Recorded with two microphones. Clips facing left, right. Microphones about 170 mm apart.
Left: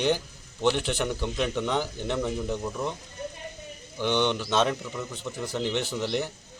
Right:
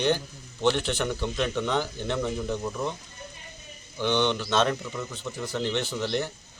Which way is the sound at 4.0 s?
10° left (ahead or behind).